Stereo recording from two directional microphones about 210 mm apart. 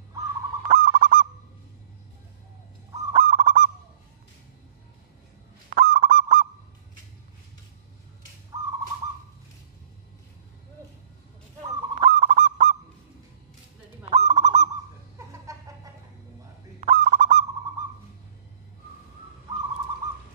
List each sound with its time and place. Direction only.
0.7 s goose: 40° right (ahead or behind)
3.1 s goose: 40° right (ahead or behind)
5.7 s goose: 40° right (ahead or behind)
12.0 s goose: 35° right (ahead or behind)
14.1 s goose: 30° right (ahead or behind)
15.1 s a sound: 15° right (ahead or behind)
16.8 s goose: 35° right (ahead or behind)